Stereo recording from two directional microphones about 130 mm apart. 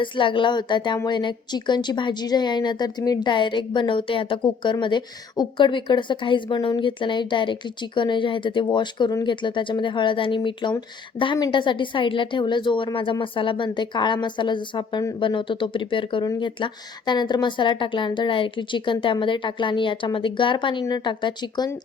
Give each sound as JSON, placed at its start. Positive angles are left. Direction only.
{"t": 0.0, "sound": "a woman's voice", "side_deg": 40}